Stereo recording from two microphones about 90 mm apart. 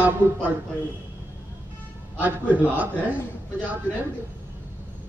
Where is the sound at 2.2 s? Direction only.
20° right (ahead or behind).